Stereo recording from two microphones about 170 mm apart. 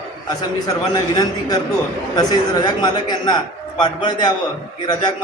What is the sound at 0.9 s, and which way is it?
A man's voice, 20° left (ahead or behind).